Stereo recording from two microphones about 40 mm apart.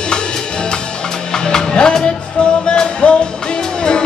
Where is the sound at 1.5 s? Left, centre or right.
Centre.